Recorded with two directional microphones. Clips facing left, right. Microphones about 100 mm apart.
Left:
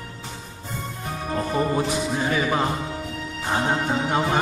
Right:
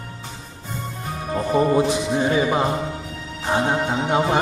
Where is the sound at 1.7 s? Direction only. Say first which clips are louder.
Right 5 dB; 25° right (ahead or behind).